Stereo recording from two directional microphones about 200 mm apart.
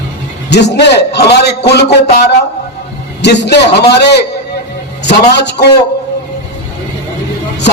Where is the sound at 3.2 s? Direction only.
60° left (ahead or behind).